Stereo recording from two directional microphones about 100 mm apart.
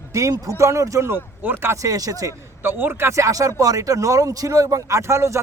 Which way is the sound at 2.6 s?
25° right (ahead or behind).